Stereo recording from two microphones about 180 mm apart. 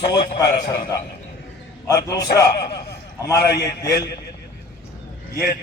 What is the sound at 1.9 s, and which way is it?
Speech, 20° left (ahead or behind).